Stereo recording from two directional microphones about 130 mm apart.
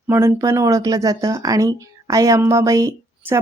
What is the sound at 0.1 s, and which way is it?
Speech, 20° right (ahead or behind).